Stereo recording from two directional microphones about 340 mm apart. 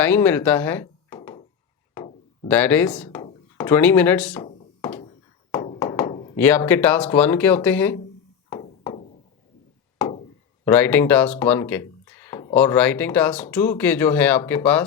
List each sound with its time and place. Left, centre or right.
0.0 s speech: centre
2.0 s a sound: centre
2.5 s speech: centre
4.4 s a sound: centre
6.3 s speech: centre
8.4 s music: centre
10.7 s speech: centre